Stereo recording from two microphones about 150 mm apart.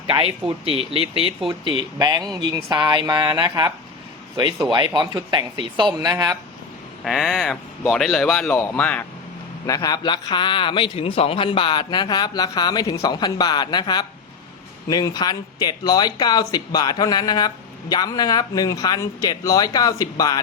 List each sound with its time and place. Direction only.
0.4 s speech: 40° right (ahead or behind); by 6.3 s 25° right (ahead or behind)
7.0 s a man's voice: centre (ahead or behind)
9.6 s a man's voice: 25° left (ahead or behind)